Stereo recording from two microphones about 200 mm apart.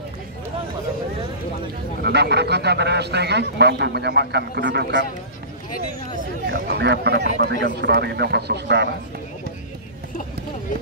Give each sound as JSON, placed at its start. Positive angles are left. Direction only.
{"t": 2.0, "sound": "a man's voice", "side_deg": -55}
{"t": 6.4, "sound": "a man's voice", "side_deg": -55}